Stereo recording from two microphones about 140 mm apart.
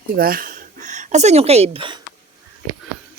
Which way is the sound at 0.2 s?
90° right.